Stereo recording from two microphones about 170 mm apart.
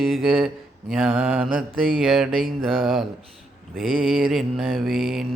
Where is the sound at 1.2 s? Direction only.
10° right (ahead or behind).